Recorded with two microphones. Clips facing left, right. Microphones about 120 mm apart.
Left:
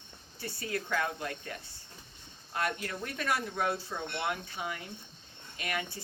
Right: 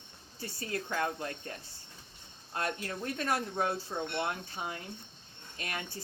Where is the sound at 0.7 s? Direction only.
30° right (ahead or behind).